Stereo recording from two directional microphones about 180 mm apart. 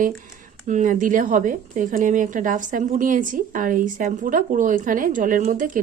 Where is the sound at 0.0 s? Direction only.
50° right (ahead or behind).